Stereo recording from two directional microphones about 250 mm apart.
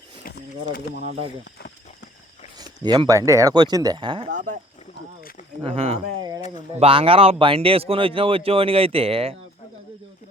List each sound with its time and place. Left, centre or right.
0.9 s speech: right
2.6 s speech: centre
5.6 s speech: right